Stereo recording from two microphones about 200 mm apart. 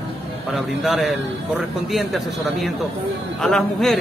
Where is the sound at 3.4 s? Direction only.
Centre (ahead or behind).